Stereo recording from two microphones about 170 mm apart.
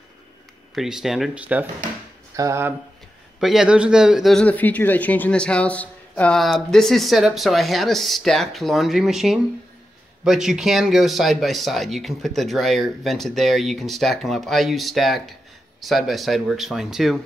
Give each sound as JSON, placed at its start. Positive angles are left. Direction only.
{"t": 0.7, "sound": "speech", "side_deg": 0}
{"t": 3.3, "sound": "speech", "side_deg": 0}